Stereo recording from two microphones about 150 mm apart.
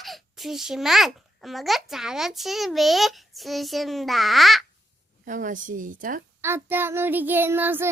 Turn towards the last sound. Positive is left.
turn(degrees=-15)  # may be behind; listen again after turning